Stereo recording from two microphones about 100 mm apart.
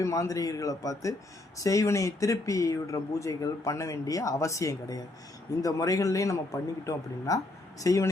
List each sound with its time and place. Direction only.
0.0 s speech: 35° left (ahead or behind)